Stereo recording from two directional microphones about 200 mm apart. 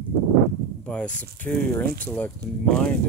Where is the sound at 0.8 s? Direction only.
5° left (ahead or behind).